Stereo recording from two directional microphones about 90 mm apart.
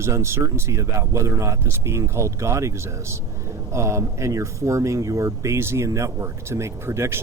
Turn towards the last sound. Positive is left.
turn(degrees=-30)  # may be behind; listen again after turning